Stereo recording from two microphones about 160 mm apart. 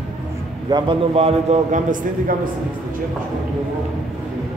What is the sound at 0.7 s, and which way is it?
A man's voice, 30° right (ahead or behind).